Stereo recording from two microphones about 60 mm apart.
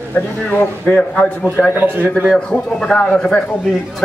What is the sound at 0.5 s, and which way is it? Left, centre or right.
Speech, centre.